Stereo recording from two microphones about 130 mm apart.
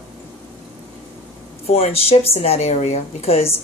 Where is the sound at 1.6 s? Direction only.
50° left (ahead or behind).